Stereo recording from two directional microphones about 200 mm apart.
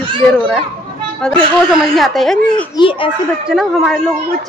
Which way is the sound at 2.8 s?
25° left (ahead or behind).